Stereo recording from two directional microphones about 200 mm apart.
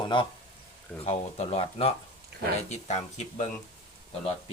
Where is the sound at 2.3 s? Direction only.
55° right (ahead or behind).